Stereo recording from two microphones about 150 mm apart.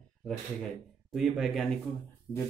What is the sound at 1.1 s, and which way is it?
Speech, centre (ahead or behind).